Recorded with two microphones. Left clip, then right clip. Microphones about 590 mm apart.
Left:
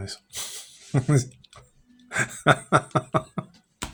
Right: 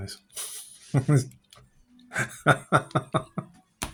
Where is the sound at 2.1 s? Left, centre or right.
Right.